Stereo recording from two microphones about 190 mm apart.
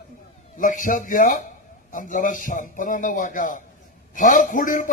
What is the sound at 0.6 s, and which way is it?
A man's voice, 45° left (ahead or behind).